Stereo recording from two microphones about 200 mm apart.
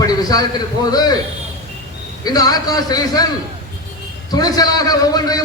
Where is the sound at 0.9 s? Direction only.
20° left (ahead or behind).